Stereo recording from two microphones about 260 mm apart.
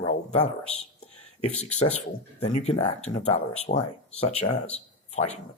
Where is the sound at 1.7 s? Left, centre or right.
Left.